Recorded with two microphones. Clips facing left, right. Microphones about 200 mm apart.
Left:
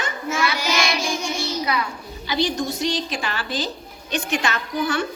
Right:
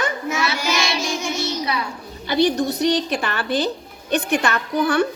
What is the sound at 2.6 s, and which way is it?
A woman's voice, 60° right (ahead or behind).